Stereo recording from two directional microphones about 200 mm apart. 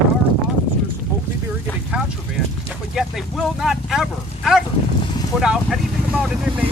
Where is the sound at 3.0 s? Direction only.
Centre (ahead or behind).